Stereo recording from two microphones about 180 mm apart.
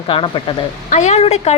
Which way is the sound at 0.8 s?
40° left (ahead or behind).